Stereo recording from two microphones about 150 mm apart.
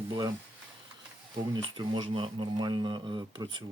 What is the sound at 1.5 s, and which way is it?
Speech, 30° right (ahead or behind).